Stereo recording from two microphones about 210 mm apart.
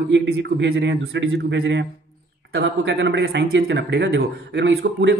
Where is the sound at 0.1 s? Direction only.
55° right (ahead or behind).